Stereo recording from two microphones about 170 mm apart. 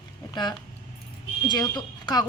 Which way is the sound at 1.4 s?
25° left (ahead or behind).